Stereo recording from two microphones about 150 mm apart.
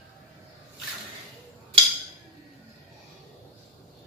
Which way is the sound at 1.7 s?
35° right (ahead or behind).